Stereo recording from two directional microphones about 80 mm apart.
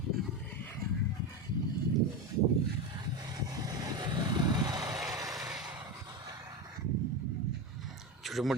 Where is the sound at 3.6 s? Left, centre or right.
Right.